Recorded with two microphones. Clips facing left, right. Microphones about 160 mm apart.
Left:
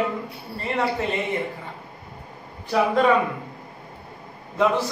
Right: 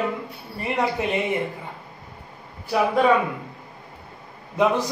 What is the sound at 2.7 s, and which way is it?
Speech, 10° right (ahead or behind).